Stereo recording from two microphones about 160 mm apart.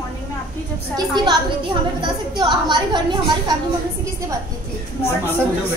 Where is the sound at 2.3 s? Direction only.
30° right (ahead or behind).